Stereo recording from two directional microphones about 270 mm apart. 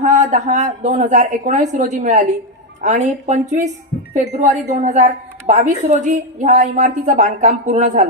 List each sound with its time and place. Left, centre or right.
0.0 s a woman's voice: right